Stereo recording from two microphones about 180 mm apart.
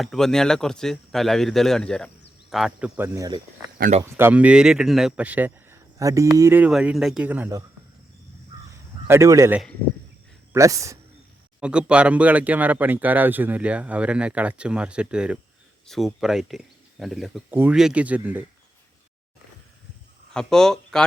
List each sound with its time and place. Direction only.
0.0 s speech: centre (ahead or behind)
3.2 s speech: 25° right (ahead or behind)
3.8 s speech: 45° right (ahead or behind)
4.0 s speech: 10° right (ahead or behind)
9.0 s speech: 15° right (ahead or behind)
11.6 s speech: 5° right (ahead or behind)
20.3 s speech: 5° left (ahead or behind)